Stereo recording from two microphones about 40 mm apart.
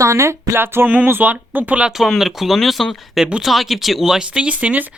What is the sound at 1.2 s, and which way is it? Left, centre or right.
Speech, right.